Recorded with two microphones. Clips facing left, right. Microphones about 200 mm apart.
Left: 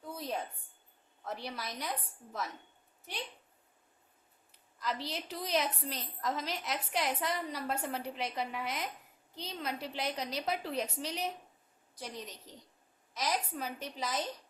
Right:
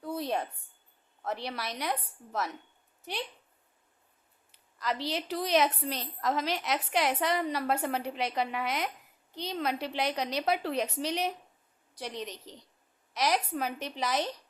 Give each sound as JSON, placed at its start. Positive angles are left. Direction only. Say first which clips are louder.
{"t": 0.0, "sound": "a sound", "louder": "right 6 dB", "side_deg": -70}
{"t": 1.2, "sound": "a woman's voice", "louder": "right 5 dB", "side_deg": -70}
{"t": 4.5, "sound": "a woman's voice", "louder": "right 4 dB", "side_deg": -75}